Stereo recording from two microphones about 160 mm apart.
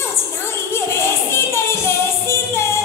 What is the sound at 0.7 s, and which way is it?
Music, 15° left (ahead or behind).